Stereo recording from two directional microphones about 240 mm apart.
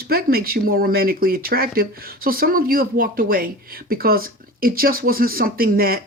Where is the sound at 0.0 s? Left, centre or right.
Right.